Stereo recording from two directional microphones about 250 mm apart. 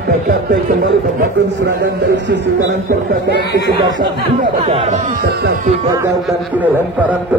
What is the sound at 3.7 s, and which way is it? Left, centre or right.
Speech, centre.